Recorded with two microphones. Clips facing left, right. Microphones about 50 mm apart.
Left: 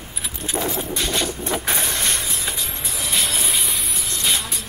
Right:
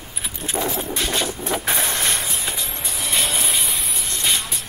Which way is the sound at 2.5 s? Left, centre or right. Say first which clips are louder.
Even; centre.